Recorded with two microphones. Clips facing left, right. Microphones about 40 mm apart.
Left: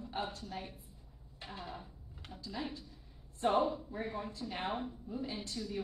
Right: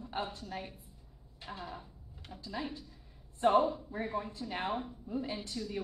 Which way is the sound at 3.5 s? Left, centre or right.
Centre.